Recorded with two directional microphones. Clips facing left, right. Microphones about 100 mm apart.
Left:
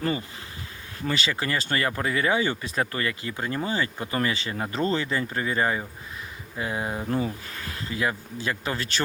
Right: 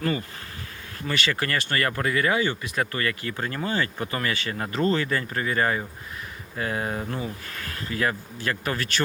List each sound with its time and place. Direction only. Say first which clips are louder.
1.0 s speech: even; 20° left (ahead or behind)